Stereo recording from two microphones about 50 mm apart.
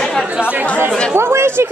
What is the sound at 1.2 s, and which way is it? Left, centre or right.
Speech, right.